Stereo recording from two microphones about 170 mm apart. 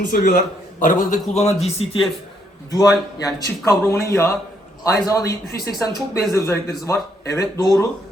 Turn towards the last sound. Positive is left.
turn(degrees=20)  # may be behind; listen again after turning